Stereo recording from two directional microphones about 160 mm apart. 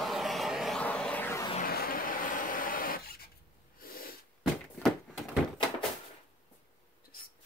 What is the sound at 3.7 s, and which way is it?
Snort, 65° left (ahead or behind).